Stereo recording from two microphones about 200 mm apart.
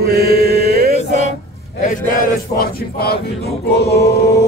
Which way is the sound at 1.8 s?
40° left (ahead or behind).